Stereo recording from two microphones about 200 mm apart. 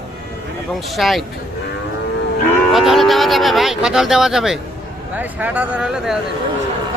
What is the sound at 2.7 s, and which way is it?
A man's voice, centre (ahead or behind).